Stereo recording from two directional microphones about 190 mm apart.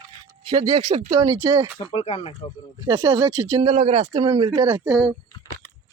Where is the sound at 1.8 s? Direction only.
30° left (ahead or behind).